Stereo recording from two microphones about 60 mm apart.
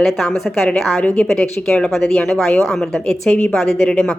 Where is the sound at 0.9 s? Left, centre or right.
Left.